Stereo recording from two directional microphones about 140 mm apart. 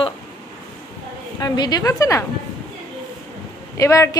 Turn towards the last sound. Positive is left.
turn(degrees=20)  # may be behind; listen again after turning